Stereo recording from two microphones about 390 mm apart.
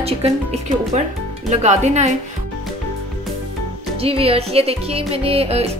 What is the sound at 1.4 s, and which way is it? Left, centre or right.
Speech, centre.